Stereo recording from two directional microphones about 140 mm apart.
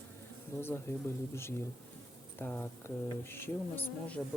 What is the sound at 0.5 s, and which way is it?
Speech, 15° left (ahead or behind).